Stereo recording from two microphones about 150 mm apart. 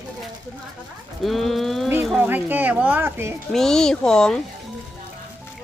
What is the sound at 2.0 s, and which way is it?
Speech, 10° right (ahead or behind).